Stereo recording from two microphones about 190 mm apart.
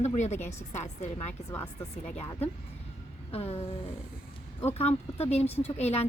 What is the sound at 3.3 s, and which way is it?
Speech, 30° left (ahead or behind).